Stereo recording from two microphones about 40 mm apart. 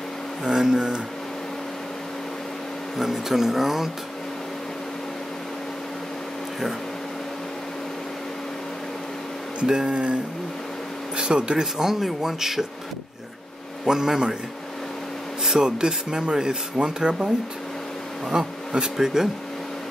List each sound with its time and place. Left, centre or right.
0.5 s speech: centre
3.0 s speech: centre
9.6 s speech: right
11.1 s speech: right
11.6 s speech: centre
13.8 s speech: centre
15.4 s speech: centre
18.3 s speech: centre